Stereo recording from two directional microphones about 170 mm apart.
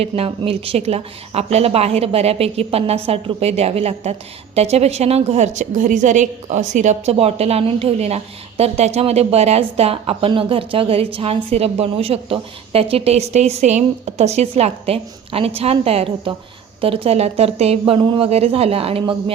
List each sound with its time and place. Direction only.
0.0 s a woman's voice: 35° right (ahead or behind)